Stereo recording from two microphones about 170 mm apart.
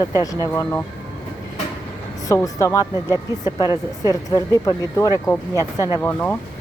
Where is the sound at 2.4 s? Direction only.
20° left (ahead or behind).